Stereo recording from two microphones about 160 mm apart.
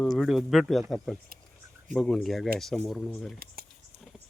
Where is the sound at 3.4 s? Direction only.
65° right (ahead or behind).